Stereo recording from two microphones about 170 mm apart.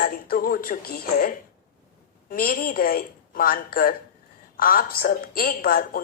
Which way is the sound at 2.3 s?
55° left (ahead or behind).